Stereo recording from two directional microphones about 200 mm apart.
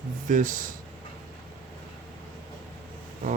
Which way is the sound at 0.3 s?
40° right (ahead or behind).